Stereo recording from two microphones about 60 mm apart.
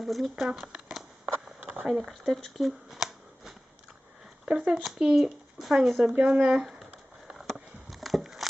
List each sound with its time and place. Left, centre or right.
0.0 s speech: centre
1.6 s a sound: right
1.9 s speech: centre
4.4 s speech: centre
6.0 s speech: centre
7.3 s a sound: centre